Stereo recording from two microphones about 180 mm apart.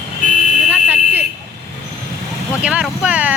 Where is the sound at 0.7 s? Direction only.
10° right (ahead or behind).